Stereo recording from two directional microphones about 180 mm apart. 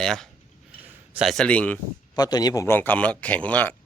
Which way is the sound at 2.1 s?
20° left (ahead or behind).